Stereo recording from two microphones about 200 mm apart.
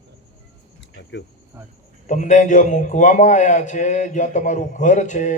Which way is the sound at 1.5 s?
15° right (ahead or behind).